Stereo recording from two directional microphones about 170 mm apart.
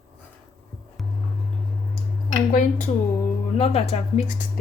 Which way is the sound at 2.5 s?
50° left (ahead or behind).